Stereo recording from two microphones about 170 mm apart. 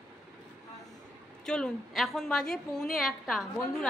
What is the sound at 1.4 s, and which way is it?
A woman's voice, 5° left (ahead or behind).